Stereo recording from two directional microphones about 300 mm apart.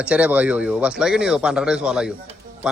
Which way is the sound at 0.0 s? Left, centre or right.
Centre.